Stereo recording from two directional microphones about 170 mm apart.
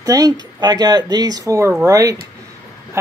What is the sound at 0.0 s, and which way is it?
Speech, 20° right (ahead or behind).